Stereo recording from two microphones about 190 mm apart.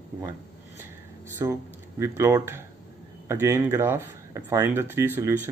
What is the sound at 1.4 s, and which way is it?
Speech, 15° right (ahead or behind).